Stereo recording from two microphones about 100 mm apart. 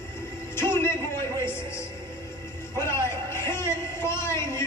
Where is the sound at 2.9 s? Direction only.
25° left (ahead or behind).